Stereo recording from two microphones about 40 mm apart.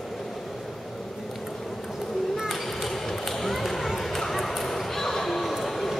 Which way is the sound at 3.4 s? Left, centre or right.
Centre.